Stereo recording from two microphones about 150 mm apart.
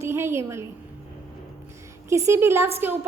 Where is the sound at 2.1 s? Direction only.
20° right (ahead or behind).